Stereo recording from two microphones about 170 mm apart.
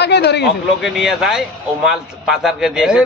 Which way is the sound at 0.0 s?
80° left.